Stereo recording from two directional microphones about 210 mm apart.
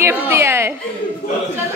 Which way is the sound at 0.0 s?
10° right (ahead or behind).